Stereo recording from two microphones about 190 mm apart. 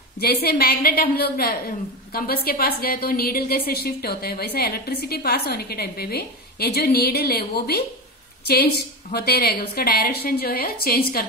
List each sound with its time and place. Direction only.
0.2 s a woman's voice: 55° left (ahead or behind)